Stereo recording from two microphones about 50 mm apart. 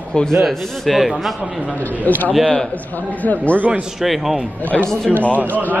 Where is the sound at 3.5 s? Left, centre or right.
Right.